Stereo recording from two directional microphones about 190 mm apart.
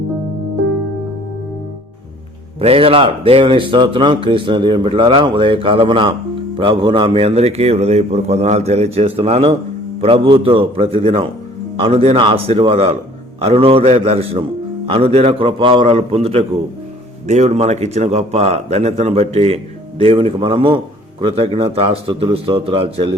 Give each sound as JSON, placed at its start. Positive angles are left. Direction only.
{"t": 2.6, "sound": "speech", "side_deg": -30}